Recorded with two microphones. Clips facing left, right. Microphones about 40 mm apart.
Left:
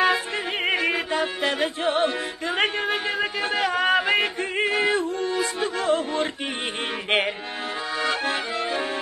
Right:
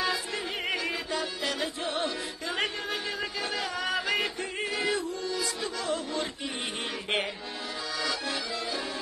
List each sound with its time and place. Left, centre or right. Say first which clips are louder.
0.0 s music: left 8 dB; left
8.0 s accordion: left 8 dB; left